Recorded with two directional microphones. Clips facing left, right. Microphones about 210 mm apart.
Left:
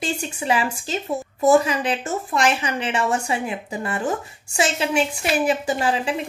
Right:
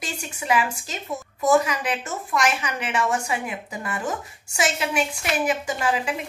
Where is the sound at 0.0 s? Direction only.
30° left (ahead or behind).